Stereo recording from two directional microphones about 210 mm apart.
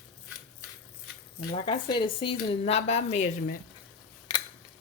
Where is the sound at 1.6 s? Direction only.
20° left (ahead or behind).